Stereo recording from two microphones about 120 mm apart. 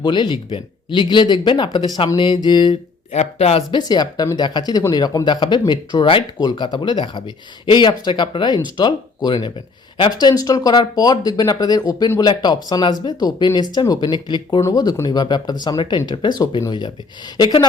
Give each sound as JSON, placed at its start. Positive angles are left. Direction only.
{"t": 0.0, "sound": "speech", "side_deg": 40}
{"t": 3.1, "sound": "speech", "side_deg": 65}
{"t": 3.7, "sound": "speech", "side_deg": 35}
{"t": 14.6, "sound": "speech", "side_deg": 30}